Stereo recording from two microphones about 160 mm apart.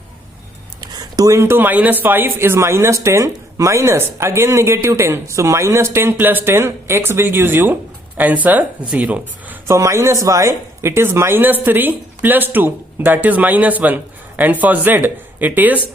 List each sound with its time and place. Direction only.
0.8 s speech: 25° right (ahead or behind)